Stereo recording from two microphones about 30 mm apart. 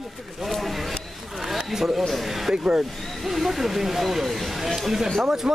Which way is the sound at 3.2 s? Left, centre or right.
Centre.